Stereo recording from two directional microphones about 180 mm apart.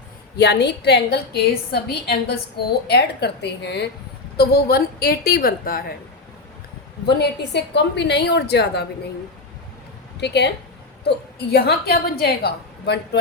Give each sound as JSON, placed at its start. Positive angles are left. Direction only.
{"t": 0.3, "sound": "a woman's voice", "side_deg": 70}
{"t": 7.0, "sound": "a woman's voice", "side_deg": 65}
{"t": 10.2, "sound": "a woman's voice", "side_deg": 70}